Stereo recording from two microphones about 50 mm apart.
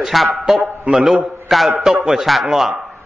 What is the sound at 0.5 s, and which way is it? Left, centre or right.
Speech, right.